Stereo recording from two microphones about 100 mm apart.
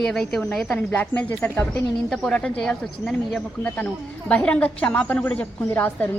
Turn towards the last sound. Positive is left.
turn(degrees=15)  # may be behind; listen again after turning